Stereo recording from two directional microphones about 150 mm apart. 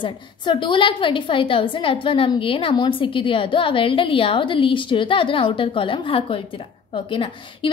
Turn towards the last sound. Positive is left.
turn(degrees=35)  # may be behind; listen again after turning